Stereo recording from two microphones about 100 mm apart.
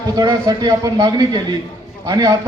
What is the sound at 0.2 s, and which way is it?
A man's voice, 40° right (ahead or behind).